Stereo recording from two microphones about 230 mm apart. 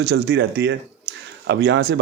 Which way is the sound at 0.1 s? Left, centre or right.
Right.